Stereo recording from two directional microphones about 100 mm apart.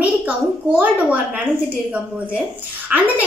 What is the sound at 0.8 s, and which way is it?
Speech, 10° right (ahead or behind).